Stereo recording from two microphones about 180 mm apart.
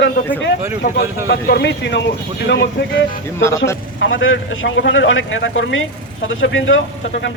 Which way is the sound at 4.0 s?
90° left.